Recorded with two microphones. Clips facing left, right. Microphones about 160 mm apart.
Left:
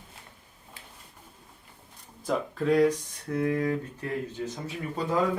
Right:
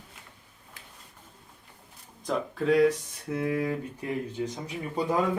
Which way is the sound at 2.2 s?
Centre (ahead or behind).